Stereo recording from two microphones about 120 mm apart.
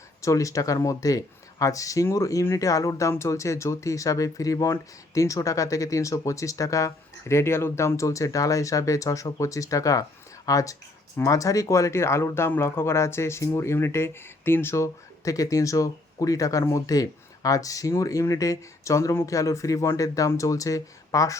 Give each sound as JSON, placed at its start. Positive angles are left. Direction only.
{"t": 0.2, "sound": "speech", "side_deg": 25}